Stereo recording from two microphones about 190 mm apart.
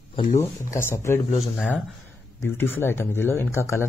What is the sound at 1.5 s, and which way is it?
Speech, centre (ahead or behind).